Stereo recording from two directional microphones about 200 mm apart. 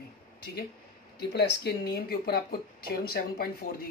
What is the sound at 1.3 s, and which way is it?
Speech, 55° left (ahead or behind).